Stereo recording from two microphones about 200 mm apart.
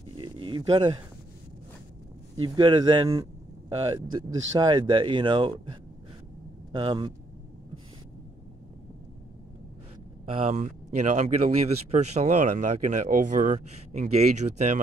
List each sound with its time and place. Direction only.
0.2 s a sound: 25° right (ahead or behind)
2.4 s speech: 25° right (ahead or behind)
10.2 s speech: 30° right (ahead or behind)